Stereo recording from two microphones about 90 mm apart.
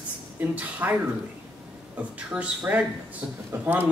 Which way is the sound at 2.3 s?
15° right (ahead or behind).